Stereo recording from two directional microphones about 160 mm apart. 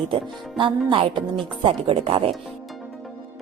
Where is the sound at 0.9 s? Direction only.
30° right (ahead or behind).